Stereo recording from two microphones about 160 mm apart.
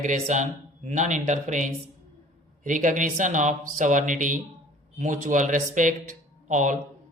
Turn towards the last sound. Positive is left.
turn(degrees=-50)  # may be behind; listen again after turning